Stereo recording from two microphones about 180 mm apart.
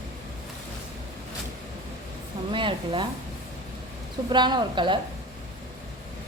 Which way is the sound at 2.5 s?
30° right (ahead or behind).